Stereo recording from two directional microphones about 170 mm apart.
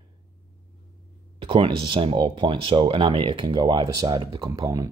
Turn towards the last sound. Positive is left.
turn(degrees=-20)  # may be behind; listen again after turning